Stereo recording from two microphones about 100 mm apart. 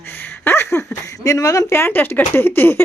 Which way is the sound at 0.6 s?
30° left (ahead or behind).